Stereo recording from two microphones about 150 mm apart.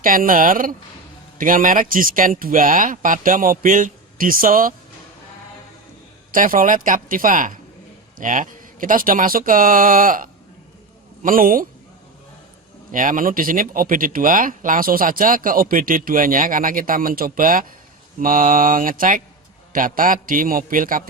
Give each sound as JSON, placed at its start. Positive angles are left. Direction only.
{"t": 0.0, "sound": "speech", "side_deg": -65}
{"t": 6.3, "sound": "speech", "side_deg": -65}
{"t": 12.9, "sound": "speech", "side_deg": -65}